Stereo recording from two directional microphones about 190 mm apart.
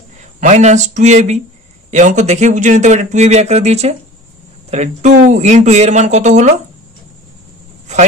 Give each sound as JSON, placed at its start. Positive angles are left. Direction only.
{"t": 0.4, "sound": "speech", "side_deg": -35}